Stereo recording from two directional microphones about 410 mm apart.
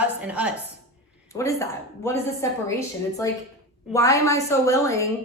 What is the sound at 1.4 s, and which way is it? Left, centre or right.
A woman's voice, centre.